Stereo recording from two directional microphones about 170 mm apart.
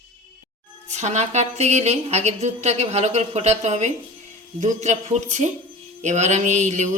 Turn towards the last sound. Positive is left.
turn(degrees=-45)  # may be behind; listen again after turning